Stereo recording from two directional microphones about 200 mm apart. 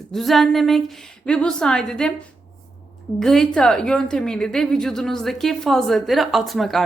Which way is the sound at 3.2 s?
Centre (ahead or behind).